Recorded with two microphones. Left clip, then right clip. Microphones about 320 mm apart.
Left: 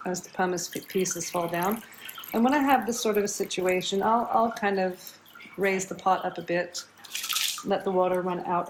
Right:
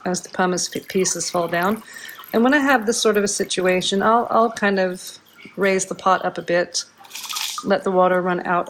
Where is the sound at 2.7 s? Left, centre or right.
Right.